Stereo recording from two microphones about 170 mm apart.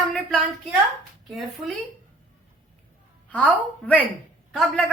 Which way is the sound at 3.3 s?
10° left (ahead or behind).